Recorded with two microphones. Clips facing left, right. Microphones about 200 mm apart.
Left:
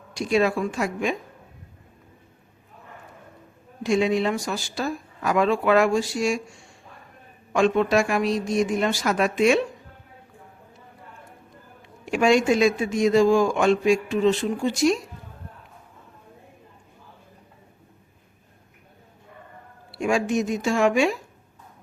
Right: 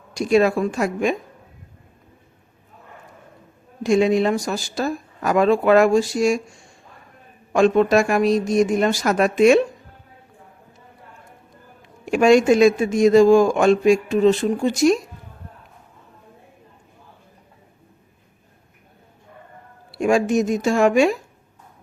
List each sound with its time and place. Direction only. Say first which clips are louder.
0.1 s a man's voice: right 5 dB; 45° right (ahead or behind)
3.8 s a man's voice: right 5 dB; 45° right (ahead or behind)
7.5 s a man's voice: right 4 dB; 45° right (ahead or behind)
12.1 s a man's voice: right 5 dB; 45° right (ahead or behind)
20.0 s a man's voice: right 5 dB; 45° right (ahead or behind)